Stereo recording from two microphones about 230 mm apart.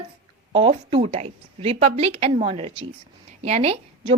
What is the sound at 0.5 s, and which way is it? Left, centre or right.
A woman's voice, right.